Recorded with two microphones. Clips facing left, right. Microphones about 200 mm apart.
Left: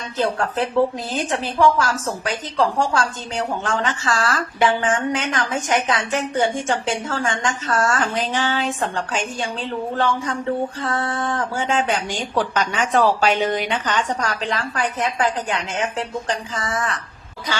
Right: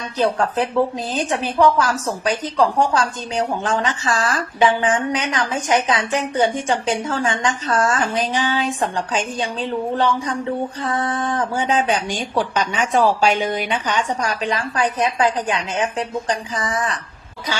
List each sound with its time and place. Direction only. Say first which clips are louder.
0.2 s a woman's voice: right 2 dB; 15° right (ahead or behind)